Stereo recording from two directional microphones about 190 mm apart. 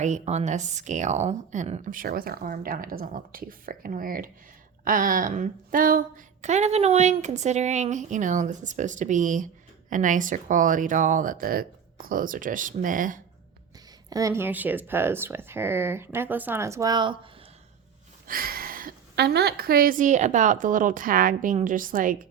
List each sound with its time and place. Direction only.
0.0 s speech: 35° right (ahead or behind)
14.1 s speech: 20° right (ahead or behind)
18.3 s speech: 50° right (ahead or behind)